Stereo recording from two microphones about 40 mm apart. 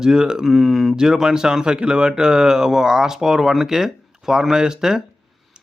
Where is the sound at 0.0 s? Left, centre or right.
Centre.